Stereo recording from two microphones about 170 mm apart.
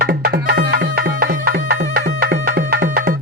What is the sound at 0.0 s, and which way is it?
Music, 65° right (ahead or behind).